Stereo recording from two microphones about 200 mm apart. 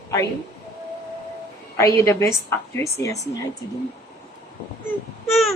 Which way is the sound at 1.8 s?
15° left (ahead or behind).